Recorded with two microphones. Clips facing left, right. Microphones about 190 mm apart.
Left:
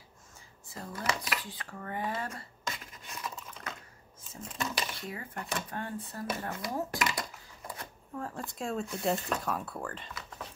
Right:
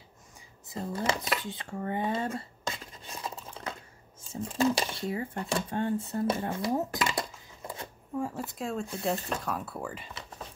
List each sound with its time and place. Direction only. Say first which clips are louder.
0.7 s a sound: right 5 dB; 25° right (ahead or behind)
4.3 s speech: right 11 dB; 30° right (ahead or behind)
8.2 s speech: right 4 dB; 5° right (ahead or behind)